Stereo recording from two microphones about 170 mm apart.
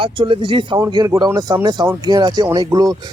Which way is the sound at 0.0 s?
30° right (ahead or behind).